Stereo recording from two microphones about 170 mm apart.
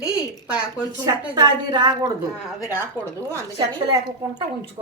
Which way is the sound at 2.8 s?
10° right (ahead or behind).